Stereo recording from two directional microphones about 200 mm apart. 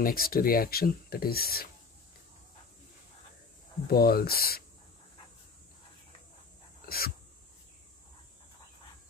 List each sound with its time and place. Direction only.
0.0 s speech: 45° left (ahead or behind)
3.8 s speech: 50° left (ahead or behind)
6.9 s dog: 50° left (ahead or behind)